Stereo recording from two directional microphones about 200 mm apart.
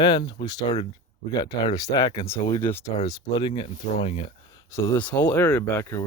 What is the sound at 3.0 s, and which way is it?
Speech, 30° left (ahead or behind).